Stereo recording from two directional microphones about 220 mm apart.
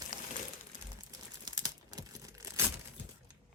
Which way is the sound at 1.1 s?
15° right (ahead or behind).